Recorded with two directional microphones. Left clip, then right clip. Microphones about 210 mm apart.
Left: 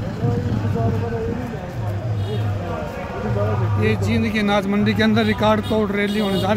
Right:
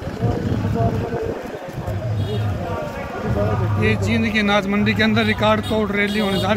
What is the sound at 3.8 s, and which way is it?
A man's voice, 5° left (ahead or behind).